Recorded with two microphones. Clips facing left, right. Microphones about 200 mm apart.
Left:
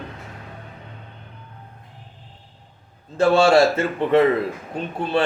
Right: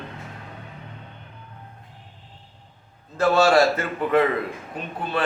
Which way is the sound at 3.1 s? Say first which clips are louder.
Left 3 dB; 25° left (ahead or behind).